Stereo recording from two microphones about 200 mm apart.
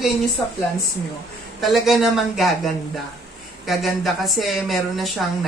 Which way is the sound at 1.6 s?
Centre (ahead or behind).